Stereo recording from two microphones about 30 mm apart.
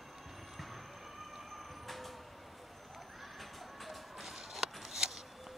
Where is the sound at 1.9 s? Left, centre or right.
Centre.